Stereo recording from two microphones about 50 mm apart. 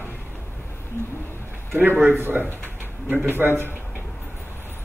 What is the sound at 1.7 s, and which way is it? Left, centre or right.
A man's voice, right.